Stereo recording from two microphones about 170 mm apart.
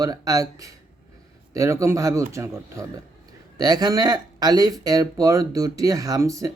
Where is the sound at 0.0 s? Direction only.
20° right (ahead or behind).